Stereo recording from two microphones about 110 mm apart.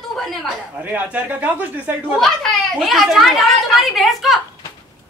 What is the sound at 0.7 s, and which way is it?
Speech, 15° right (ahead or behind).